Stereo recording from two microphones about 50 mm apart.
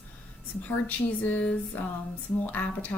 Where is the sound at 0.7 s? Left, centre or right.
Left.